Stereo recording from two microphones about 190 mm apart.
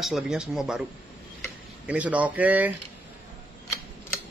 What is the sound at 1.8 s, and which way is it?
Speech, 5° right (ahead or behind).